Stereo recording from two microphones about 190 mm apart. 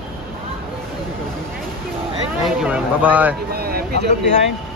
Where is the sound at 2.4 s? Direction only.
5° right (ahead or behind).